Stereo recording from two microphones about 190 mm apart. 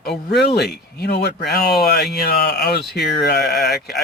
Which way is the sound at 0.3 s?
60° left (ahead or behind).